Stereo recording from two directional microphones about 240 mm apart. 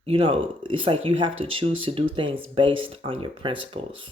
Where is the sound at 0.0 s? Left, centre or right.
Right.